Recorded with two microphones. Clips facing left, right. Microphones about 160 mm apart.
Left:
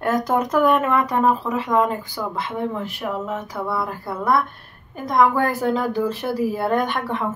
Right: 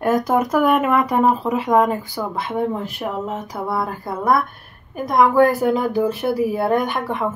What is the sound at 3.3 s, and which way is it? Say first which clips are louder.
A woman's voice: right 1 dB; 15° right (ahead or behind).